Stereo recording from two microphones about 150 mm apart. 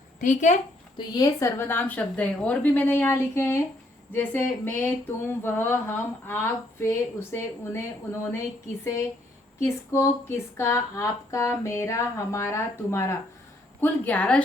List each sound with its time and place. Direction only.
0.2 s speech: 55° left (ahead or behind)
0.9 s speech: 25° left (ahead or behind)
8.8 s a sound: 20° left (ahead or behind)
13.8 s speech: 10° left (ahead or behind)